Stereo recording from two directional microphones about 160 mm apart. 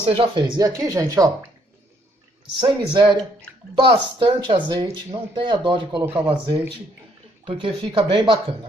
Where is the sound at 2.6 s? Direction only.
30° right (ahead or behind).